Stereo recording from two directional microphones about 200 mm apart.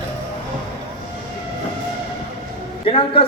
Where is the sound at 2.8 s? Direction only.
25° left (ahead or behind).